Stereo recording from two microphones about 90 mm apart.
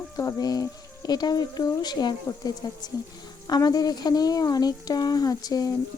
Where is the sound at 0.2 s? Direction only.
30° left (ahead or behind).